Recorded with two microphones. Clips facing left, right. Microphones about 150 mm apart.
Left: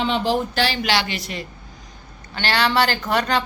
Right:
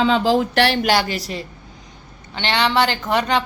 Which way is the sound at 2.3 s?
20° right (ahead or behind).